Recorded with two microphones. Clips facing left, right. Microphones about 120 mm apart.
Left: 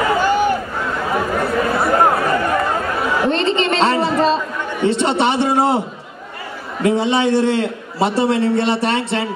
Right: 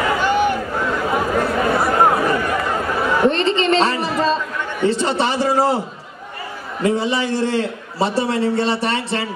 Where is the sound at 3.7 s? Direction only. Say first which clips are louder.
Left 1 dB; 30° left (ahead or behind).